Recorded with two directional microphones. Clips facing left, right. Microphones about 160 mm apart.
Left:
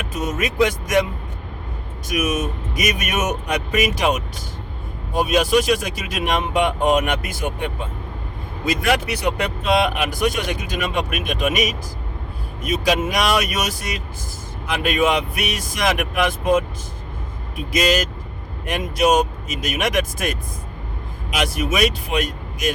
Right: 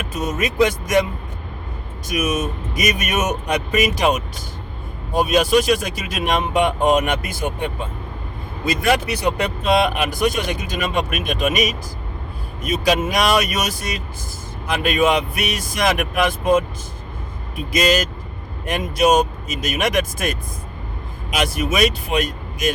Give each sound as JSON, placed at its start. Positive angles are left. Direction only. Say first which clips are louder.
{"t": 0.3, "sound": "speech", "louder": "right 1 dB", "side_deg": -35}
{"t": 2.0, "sound": "speech", "louder": "even", "side_deg": -30}
{"t": 8.6, "sound": "speech", "louder": "right 1 dB", "side_deg": -30}
{"t": 18.6, "sound": "speech", "louder": "right 1 dB", "side_deg": -35}
{"t": 21.3, "sound": "speech", "louder": "right 1 dB", "side_deg": -35}